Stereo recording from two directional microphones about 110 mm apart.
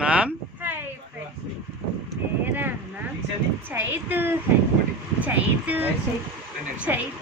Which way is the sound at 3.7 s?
20° right (ahead or behind).